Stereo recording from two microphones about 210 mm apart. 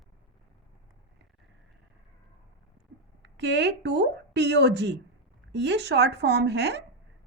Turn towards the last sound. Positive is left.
turn(degrees=-55)  # may be behind; listen again after turning